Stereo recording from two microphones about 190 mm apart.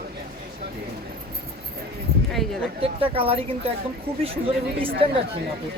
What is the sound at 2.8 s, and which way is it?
Speech, 30° right (ahead or behind).